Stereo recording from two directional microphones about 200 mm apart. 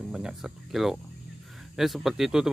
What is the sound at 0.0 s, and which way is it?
Speech, 5° right (ahead or behind).